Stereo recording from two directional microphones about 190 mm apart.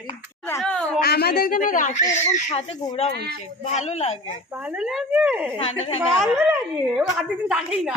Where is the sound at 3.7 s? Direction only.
35° left (ahead or behind).